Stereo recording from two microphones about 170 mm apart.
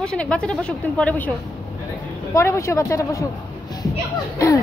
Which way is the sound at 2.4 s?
15° left (ahead or behind).